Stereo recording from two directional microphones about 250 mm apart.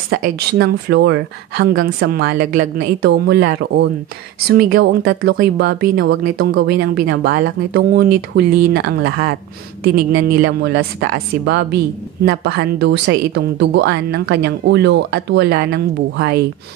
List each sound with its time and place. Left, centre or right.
0.1 s a woman's voice: right